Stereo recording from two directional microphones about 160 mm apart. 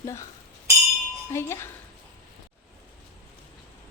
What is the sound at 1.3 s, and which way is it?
Speech, 15° left (ahead or behind).